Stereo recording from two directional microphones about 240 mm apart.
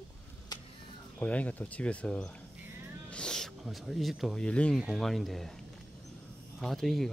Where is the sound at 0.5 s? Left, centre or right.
Centre.